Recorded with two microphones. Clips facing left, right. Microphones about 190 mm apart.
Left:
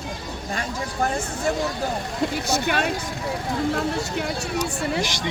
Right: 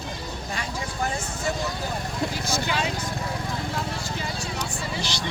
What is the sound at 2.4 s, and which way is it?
Speech, 65° left (ahead or behind).